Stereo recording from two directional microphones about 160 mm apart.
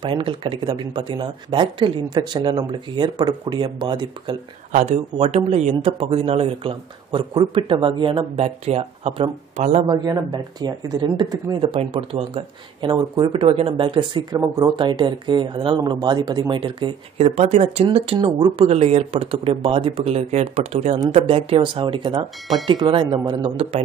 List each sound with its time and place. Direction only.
0.0 s speech: 35° right (ahead or behind)
4.7 s speech: 45° right (ahead or behind)
9.6 s speech: 50° right (ahead or behind)
9.8 s speech: 25° right (ahead or behind)